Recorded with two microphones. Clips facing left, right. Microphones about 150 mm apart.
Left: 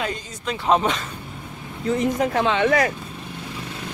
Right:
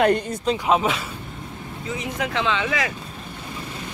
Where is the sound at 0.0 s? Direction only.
60° right (ahead or behind).